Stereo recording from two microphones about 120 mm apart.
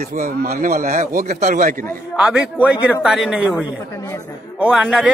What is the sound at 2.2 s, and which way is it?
A man's voice, 5° right (ahead or behind).